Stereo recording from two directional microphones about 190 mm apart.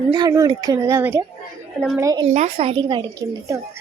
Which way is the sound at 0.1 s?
20° right (ahead or behind).